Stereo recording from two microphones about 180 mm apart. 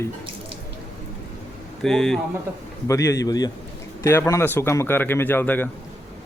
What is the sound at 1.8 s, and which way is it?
Speech, centre (ahead or behind).